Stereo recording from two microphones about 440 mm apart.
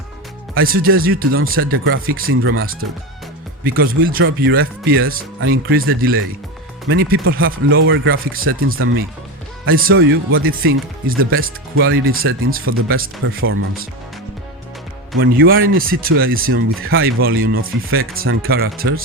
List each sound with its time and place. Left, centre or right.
0.5 s speech: right
4.0 s speech: right
15.2 s speech: right